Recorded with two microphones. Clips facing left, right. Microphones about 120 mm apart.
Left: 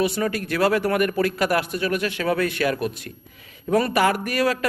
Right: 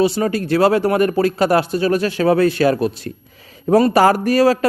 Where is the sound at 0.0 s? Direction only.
30° right (ahead or behind).